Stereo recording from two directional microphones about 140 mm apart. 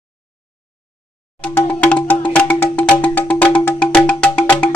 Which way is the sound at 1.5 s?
10° left (ahead or behind).